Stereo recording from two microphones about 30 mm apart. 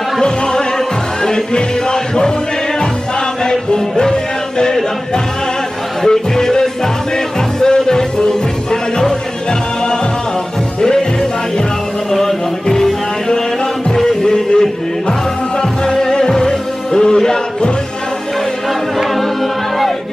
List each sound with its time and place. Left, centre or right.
0.2 s music: left
3.4 s music: left
6.0 s music: left
12.1 s music: centre